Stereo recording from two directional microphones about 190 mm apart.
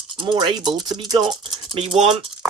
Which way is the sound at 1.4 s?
25° right (ahead or behind).